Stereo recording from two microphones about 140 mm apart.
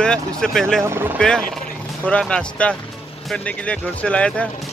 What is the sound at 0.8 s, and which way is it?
Speech, 20° right (ahead or behind).